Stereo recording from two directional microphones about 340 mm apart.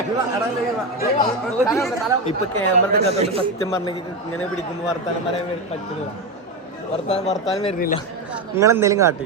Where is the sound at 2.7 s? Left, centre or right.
Right.